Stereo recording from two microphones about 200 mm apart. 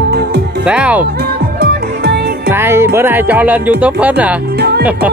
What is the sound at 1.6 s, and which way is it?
Music, 55° right (ahead or behind).